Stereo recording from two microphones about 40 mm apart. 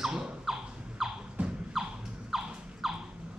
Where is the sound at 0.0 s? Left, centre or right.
Centre.